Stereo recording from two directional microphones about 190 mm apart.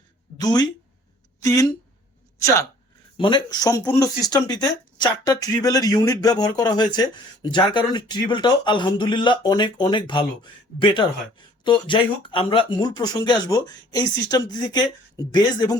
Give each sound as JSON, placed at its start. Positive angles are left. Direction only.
{"t": 0.3, "sound": "speech", "side_deg": 20}